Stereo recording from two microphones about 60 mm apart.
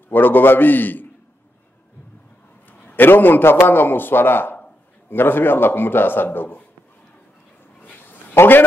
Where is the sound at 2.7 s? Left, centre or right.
Left.